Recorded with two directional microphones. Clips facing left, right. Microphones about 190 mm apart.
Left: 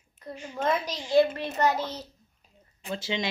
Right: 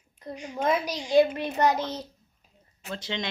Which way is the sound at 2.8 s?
5° left (ahead or behind).